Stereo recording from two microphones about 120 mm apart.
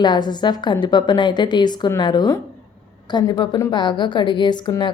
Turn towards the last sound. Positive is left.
turn(degrees=35)  # may be behind; listen again after turning